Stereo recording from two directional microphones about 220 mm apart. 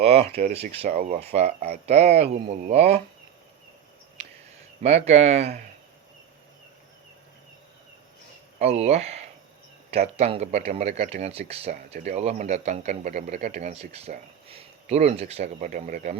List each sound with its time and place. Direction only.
0.0 s speech: 30° right (ahead or behind)
4.8 s speech: 30° right (ahead or behind)
8.5 s speech: 30° right (ahead or behind)